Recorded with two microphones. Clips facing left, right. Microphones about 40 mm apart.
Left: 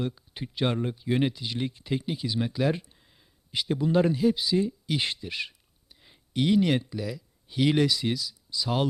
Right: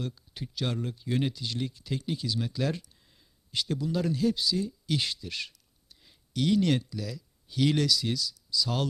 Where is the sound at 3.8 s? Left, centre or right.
Left.